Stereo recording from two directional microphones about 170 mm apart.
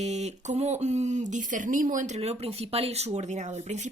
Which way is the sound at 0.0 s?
40° right (ahead or behind).